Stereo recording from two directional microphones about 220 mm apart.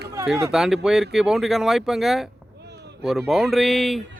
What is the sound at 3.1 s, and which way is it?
Speech, centre (ahead or behind).